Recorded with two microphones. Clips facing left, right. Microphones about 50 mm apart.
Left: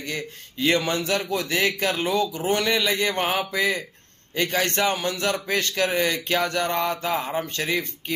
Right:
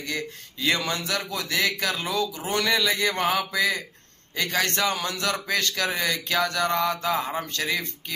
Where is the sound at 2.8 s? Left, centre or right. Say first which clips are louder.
Left 1 dB; left.